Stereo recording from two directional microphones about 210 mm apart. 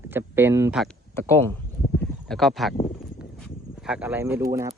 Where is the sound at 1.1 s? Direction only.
10° left (ahead or behind).